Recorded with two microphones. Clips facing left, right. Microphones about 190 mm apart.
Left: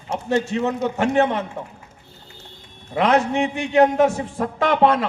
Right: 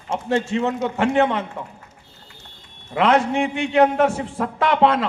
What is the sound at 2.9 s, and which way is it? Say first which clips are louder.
A man's voice: even; 40° left (ahead or behind).